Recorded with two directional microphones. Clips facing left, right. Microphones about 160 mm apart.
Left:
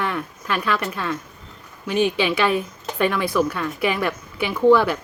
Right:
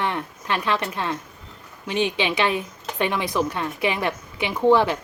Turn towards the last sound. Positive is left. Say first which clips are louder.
# left 2 dB
turn(degrees=-20)  # may be behind; listen again after turning